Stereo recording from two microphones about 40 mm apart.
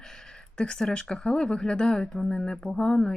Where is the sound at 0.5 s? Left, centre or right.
Left.